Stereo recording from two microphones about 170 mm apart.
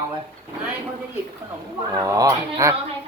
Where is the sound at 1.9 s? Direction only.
20° right (ahead or behind).